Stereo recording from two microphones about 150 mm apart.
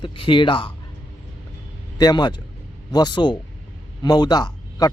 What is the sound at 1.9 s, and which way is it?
A man's voice, 30° left (ahead or behind).